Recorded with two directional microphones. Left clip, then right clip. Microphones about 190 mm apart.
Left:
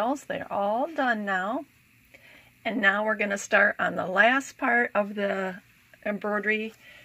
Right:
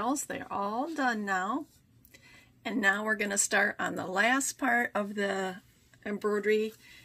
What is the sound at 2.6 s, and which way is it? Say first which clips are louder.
A woman's voice: left 5 dB; 30° left (ahead or behind).